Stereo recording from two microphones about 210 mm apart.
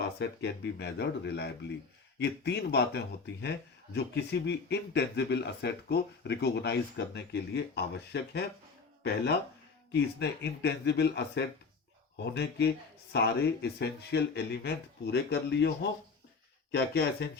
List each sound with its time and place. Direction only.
0.2 s speech: 55° left (ahead or behind)
9.9 s speech: 55° left (ahead or behind)